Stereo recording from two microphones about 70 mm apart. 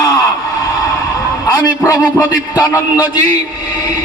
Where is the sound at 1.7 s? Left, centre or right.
Left.